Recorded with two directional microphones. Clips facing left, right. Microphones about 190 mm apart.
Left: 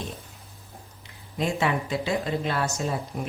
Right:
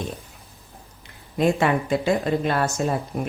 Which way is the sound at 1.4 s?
50° right (ahead or behind).